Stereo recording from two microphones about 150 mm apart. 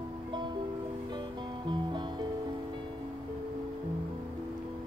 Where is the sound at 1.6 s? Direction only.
30° right (ahead or behind).